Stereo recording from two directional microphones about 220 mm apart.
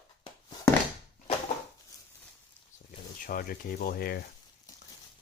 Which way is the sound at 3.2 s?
40° left (ahead or behind).